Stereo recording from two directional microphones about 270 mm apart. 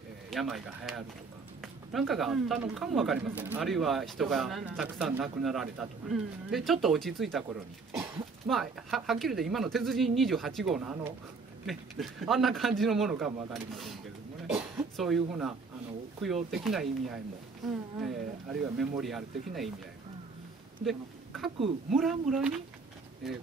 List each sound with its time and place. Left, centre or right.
0.3 s speech: centre
14.5 s a sound: centre
16.4 s speech: centre
20.8 s speech: centre